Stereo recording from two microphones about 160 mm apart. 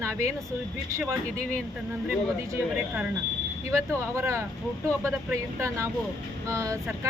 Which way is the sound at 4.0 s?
20° right (ahead or behind).